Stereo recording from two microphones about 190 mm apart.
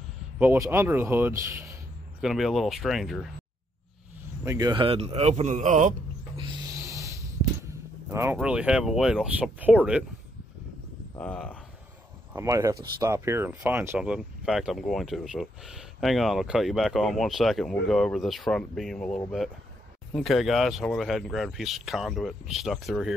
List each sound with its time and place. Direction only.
0.4 s speech: 10° right (ahead or behind)
2.2 s speech: centre (ahead or behind)
4.5 s a man's voice: 20° right (ahead or behind); by 5.9 s 40° right (ahead or behind)
6.7 s snort: 15° right (ahead or behind)
8.1 s speech: 15° right (ahead or behind)
11.1 s speech: 5° left (ahead or behind)
12.4 s speech: 15° right (ahead or behind); by 23.1 s centre (ahead or behind)